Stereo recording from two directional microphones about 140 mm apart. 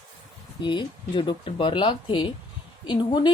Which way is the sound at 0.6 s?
35° left (ahead or behind).